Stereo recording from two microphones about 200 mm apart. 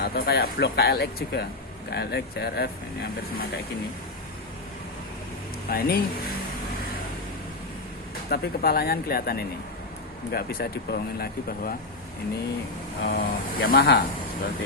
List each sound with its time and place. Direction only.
0.0 s speech: 50° left (ahead or behind)
5.6 s speech: 50° left (ahead or behind)
8.3 s speech: 50° left (ahead or behind)
13.0 s speech: 50° left (ahead or behind)